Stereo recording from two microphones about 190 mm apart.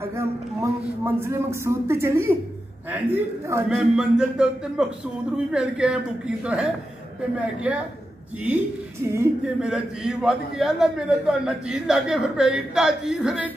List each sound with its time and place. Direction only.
0.1 s a man's voice: 15° right (ahead or behind)
9.1 s speech: 15° right (ahead or behind)
9.7 s a man's voice: centre (ahead or behind)